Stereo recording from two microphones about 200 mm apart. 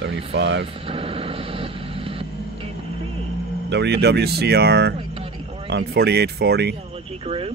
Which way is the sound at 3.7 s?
60° right (ahead or behind).